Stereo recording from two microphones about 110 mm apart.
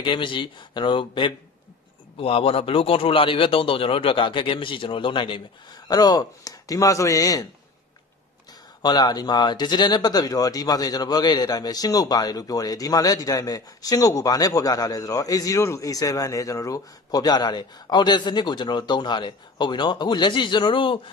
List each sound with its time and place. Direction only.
0.0 s a man's voice: 50° left (ahead or behind)
2.1 s a man's voice: 60° left (ahead or behind); by 7.4 s 30° left (ahead or behind)
8.8 s speech: 40° left (ahead or behind)